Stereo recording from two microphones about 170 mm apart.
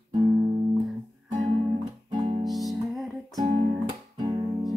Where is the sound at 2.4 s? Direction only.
Centre (ahead or behind).